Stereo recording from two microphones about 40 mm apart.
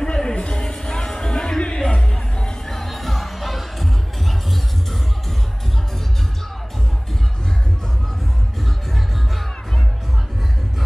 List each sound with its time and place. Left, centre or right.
0.1 s a sound: left
1.6 s music: left
2.8 s music: centre